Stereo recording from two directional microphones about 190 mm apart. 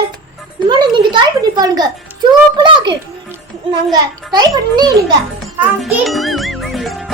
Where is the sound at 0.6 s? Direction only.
25° right (ahead or behind).